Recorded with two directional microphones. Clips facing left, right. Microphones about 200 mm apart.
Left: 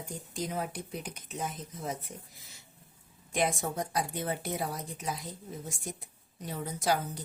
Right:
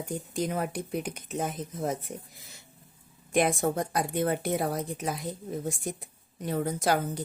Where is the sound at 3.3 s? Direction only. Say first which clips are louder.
Right 6 dB; 55° right (ahead or behind).